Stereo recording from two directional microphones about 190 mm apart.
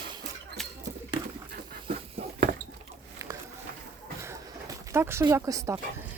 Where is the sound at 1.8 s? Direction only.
55° right (ahead or behind).